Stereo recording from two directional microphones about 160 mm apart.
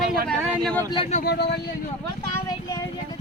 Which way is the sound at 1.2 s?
90° left.